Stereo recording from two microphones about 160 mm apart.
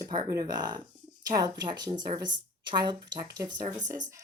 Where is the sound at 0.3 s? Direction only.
25° right (ahead or behind).